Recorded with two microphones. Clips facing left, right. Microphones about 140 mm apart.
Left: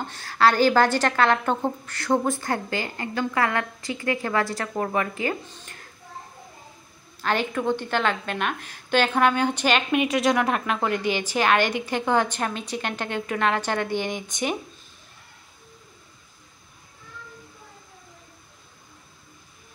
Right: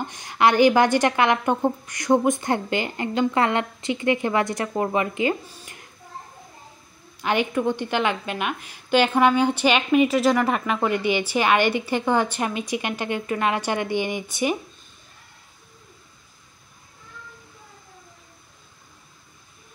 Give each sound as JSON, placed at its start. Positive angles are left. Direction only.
{"t": 0.0, "sound": "a woman's voice", "side_deg": -15}
{"t": 7.2, "sound": "a woman's voice", "side_deg": -15}